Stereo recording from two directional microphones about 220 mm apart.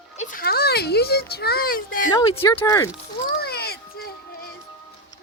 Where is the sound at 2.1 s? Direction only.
20° left (ahead or behind).